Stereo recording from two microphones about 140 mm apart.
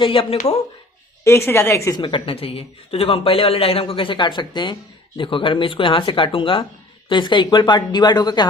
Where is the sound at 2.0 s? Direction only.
35° left (ahead or behind).